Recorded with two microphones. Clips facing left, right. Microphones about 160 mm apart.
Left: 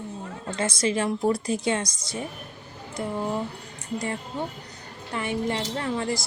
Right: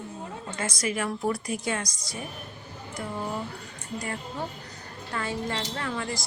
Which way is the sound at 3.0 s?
20° left (ahead or behind).